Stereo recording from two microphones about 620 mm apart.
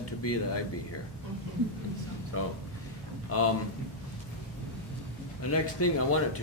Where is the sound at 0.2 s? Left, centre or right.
Left.